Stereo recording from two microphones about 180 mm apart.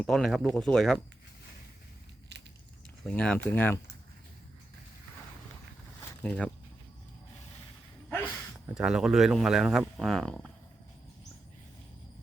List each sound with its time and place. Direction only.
0.0 s speech: centre (ahead or behind)
2.3 s a sound: 70° right (ahead or behind)
3.0 s speech: 5° left (ahead or behind)
6.2 s speech: 5° left (ahead or behind)
8.7 s speech: 5° right (ahead or behind)